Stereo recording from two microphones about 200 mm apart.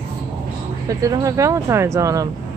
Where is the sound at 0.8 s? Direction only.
15° right (ahead or behind).